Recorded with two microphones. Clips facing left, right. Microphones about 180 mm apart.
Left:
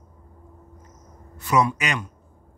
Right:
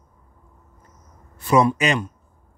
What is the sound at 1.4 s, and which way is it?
Speech, 30° right (ahead or behind).